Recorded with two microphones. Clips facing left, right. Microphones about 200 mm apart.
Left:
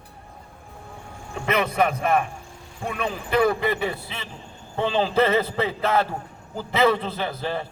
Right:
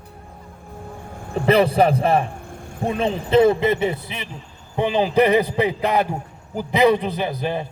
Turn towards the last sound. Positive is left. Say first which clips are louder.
# right 4 dB
turn(degrees=-15)  # may be behind; listen again after turning